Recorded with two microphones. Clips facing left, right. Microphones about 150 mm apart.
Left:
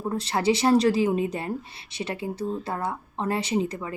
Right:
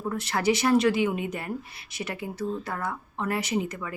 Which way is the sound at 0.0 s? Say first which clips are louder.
Left 2 dB; 30° left (ahead or behind).